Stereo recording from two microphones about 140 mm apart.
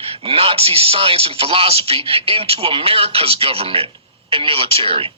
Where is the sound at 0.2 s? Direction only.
40° right (ahead or behind).